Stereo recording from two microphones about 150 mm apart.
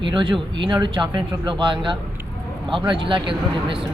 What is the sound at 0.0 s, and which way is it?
Speech, 35° right (ahead or behind).